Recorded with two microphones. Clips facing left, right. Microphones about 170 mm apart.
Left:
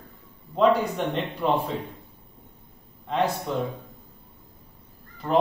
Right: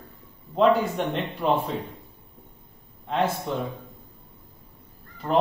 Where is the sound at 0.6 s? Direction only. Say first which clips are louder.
Right 1 dB; centre (ahead or behind).